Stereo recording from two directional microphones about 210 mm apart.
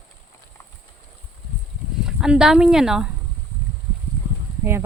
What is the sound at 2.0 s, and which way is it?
Speech, 5° right (ahead or behind).